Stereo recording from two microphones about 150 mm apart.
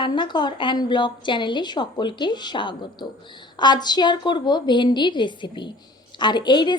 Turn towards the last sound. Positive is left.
turn(degrees=30)  # may be behind; listen again after turning